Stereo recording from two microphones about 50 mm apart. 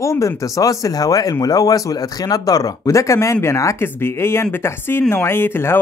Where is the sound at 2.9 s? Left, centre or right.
Left.